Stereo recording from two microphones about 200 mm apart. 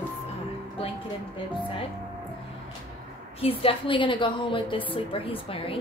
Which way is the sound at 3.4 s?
30° left (ahead or behind).